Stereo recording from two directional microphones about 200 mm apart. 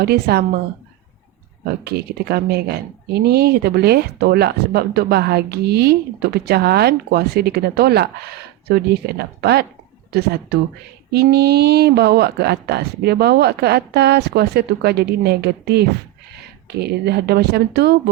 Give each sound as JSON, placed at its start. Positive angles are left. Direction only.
{"t": 0.0, "sound": "speech", "side_deg": -50}
{"t": 1.6, "sound": "speech", "side_deg": -50}